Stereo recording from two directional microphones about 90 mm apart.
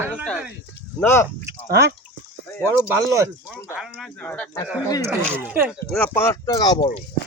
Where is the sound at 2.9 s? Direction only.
35° right (ahead or behind).